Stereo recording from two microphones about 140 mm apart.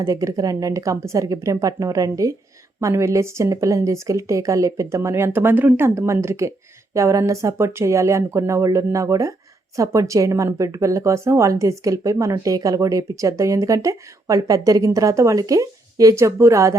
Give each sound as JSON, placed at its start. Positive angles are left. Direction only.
{"t": 0.0, "sound": "speech", "side_deg": -25}